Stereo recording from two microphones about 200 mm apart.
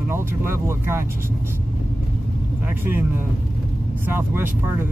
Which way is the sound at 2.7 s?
10° right (ahead or behind).